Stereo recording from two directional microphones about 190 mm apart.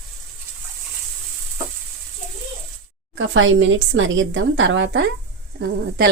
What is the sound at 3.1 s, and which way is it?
A woman's voice, 90° right.